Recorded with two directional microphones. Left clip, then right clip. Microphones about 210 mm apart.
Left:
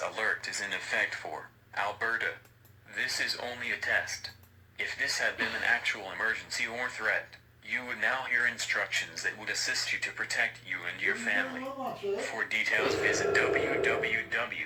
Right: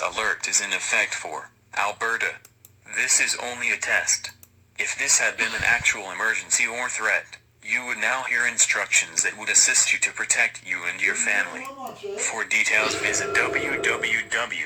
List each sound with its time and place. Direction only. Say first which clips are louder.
0.0 s speech: right 7 dB; 40° right (ahead or behind)